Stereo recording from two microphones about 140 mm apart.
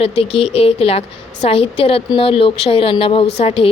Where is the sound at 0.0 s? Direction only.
45° left (ahead or behind).